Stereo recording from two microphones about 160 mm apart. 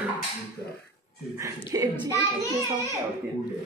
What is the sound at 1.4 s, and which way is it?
Speech, 15° right (ahead or behind).